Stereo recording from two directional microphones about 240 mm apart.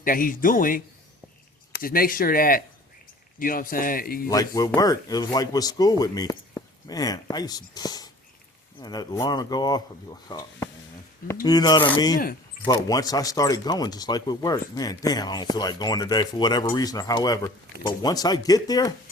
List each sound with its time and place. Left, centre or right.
0.0 s speech: left
4.3 s speech: centre